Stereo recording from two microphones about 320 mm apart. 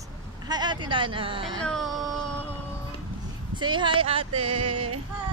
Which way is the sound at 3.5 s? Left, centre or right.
Centre.